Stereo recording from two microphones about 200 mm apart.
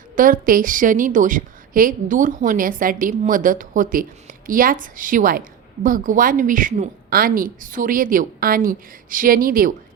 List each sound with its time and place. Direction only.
0.2 s a woman's voice: 45° right (ahead or behind)